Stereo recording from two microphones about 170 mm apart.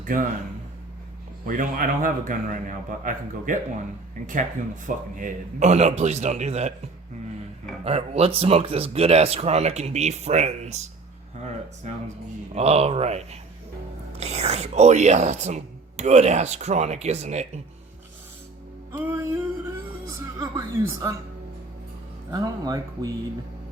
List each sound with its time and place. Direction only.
0.0 s a man's voice: 50° right (ahead or behind)
1.5 s a man's voice: 55° right (ahead or behind)
4.9 s speech: 50° right (ahead or behind)
7.9 s speech: 35° right (ahead or behind)
12.5 s speech: 40° right (ahead or behind)
18.9 s music: 15° right (ahead or behind)
22.3 s speech: 20° right (ahead or behind)